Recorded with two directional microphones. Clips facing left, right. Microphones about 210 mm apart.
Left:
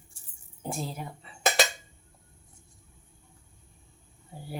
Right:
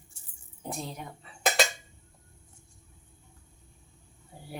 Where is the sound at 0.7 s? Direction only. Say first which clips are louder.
Left 2 dB; 5° left (ahead or behind).